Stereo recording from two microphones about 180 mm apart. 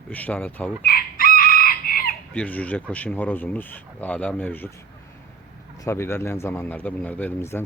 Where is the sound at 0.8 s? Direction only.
55° left (ahead or behind).